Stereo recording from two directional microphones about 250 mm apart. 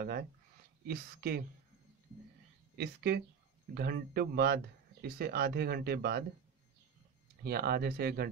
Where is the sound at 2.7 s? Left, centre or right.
Right.